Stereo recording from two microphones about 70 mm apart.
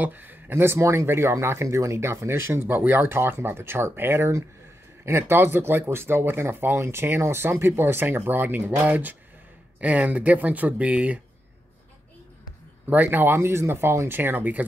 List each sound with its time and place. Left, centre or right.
0.0 s speech: right
12.8 s speech: right